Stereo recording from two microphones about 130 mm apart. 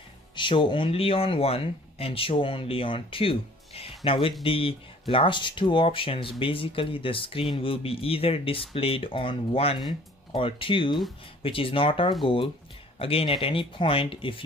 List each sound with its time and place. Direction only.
0.4 s speech: 40° left (ahead or behind)